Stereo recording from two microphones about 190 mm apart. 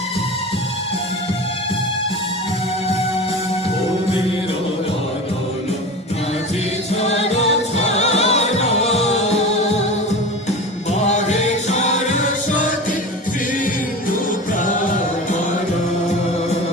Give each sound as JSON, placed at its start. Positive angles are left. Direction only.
{"t": 6.9, "sound": "music", "side_deg": 35}
{"t": 11.0, "sound": "music", "side_deg": 35}